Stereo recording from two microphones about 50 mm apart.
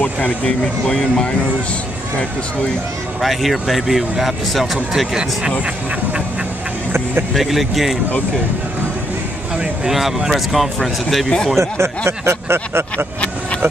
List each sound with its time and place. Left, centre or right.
0.0 s speech: left
3.2 s speech: centre
7.3 s speech: centre
9.8 s speech: centre
11.5 s speech: right
12.9 s speech: left